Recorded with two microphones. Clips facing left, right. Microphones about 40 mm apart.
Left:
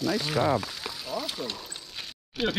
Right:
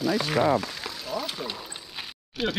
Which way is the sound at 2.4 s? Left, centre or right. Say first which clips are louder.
Even; centre.